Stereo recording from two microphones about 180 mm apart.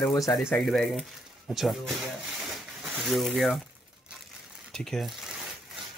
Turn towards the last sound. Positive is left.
turn(degrees=0)  # may be behind; listen again after turning